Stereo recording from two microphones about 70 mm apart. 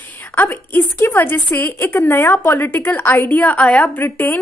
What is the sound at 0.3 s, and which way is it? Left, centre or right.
A woman's voice, left.